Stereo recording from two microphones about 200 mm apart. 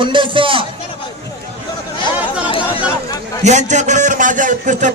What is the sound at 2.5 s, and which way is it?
Chatter, 25° left (ahead or behind).